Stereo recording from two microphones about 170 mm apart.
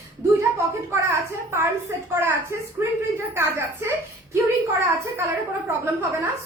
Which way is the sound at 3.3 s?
15° right (ahead or behind).